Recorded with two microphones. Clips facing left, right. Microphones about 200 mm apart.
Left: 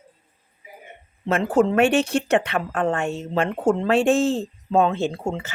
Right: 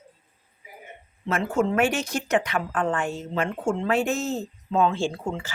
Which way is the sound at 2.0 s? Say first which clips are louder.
Left 8 dB; 65° left (ahead or behind).